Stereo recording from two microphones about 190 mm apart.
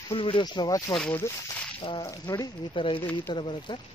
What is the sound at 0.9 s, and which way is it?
Speech, 5° left (ahead or behind).